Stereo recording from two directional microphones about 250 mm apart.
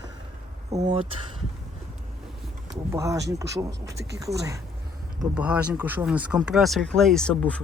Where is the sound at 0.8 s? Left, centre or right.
Right.